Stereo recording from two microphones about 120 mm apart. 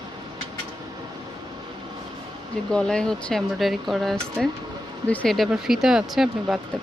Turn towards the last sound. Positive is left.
turn(degrees=0)  # may be behind; listen again after turning